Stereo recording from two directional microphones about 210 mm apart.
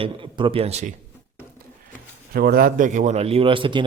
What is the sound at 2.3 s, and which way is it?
Speech, 45° right (ahead or behind).